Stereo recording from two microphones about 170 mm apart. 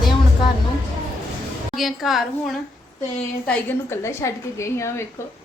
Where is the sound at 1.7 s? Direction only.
Centre (ahead or behind).